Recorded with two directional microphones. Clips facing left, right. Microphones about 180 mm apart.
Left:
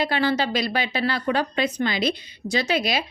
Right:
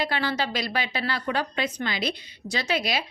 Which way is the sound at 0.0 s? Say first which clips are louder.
Left 5 dB; 20° left (ahead or behind).